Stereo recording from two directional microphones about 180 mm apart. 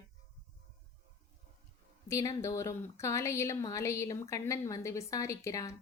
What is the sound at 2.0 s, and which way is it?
Speech, 15° left (ahead or behind).